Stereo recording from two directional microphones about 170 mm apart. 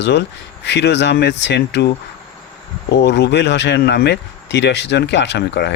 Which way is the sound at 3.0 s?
85° left.